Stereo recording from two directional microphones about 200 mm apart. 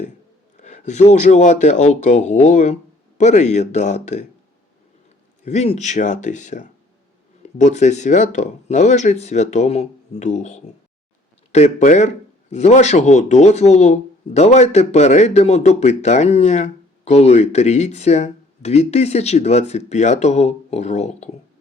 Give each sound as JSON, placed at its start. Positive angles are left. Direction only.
{"t": 0.5, "sound": "a man's voice", "side_deg": 35}
{"t": 5.5, "sound": "a man's voice", "side_deg": 35}